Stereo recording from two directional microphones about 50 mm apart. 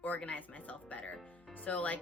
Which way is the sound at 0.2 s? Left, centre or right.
Left.